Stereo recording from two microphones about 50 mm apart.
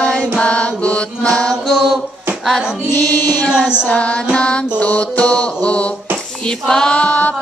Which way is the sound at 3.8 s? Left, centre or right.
Left.